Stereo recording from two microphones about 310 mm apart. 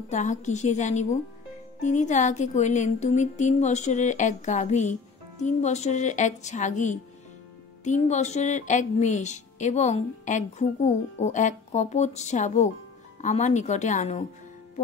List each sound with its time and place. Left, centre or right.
0.1 s speech: left